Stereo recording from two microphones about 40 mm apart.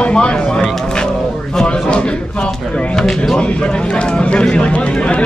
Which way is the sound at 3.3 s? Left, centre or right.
Left.